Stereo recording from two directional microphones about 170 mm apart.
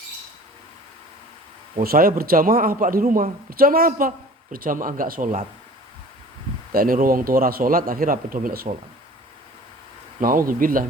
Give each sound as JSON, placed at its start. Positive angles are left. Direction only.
{"t": 1.8, "sound": "a man's voice", "side_deg": -60}
{"t": 6.7, "sound": "a man's voice", "side_deg": -55}
{"t": 10.2, "sound": "speech", "side_deg": -55}